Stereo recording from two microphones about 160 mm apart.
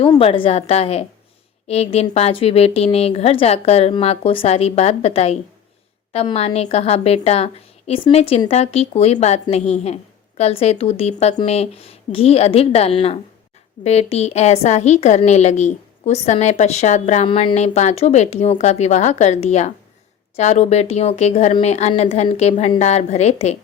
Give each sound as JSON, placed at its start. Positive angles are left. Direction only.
{"t": 0.2, "sound": "a woman's voice", "side_deg": 35}
{"t": 17.2, "sound": "a woman's voice", "side_deg": 35}